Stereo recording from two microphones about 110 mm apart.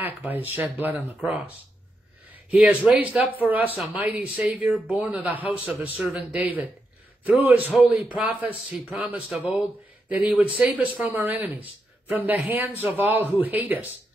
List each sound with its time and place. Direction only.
0.0 s speech: 15° right (ahead or behind)
2.5 s speech: 15° right (ahead or behind)